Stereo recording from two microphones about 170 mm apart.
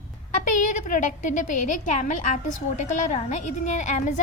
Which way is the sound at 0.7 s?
50° left (ahead or behind).